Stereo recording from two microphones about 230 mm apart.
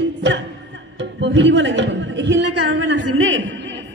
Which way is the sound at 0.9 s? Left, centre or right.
Right.